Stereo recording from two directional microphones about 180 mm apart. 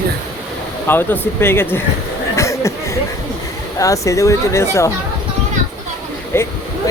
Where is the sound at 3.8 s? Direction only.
20° left (ahead or behind).